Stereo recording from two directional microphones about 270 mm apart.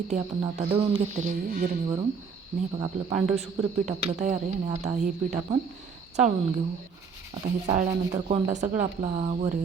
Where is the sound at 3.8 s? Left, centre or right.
Right.